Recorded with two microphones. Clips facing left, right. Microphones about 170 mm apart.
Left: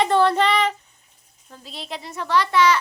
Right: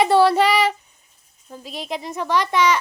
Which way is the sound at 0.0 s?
10° right (ahead or behind).